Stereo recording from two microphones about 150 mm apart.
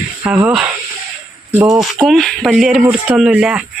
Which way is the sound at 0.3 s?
10° right (ahead or behind).